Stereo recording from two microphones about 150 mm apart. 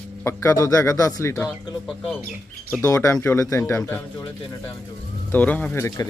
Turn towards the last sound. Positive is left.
turn(degrees=20)  # may be behind; listen again after turning